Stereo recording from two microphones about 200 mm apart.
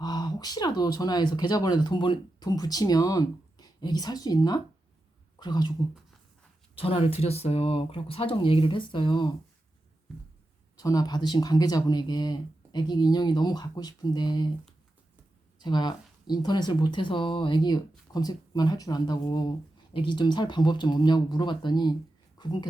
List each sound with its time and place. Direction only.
0.0 s speech: 20° left (ahead or behind)
6.7 s speech: 30° left (ahead or behind)
10.8 s speech: 20° left (ahead or behind)
15.5 s speech: 20° left (ahead or behind)
22.4 s a sound: 20° left (ahead or behind)